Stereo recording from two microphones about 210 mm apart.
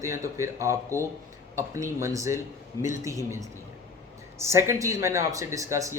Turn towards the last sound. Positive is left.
turn(degrees=-15)  # may be behind; listen again after turning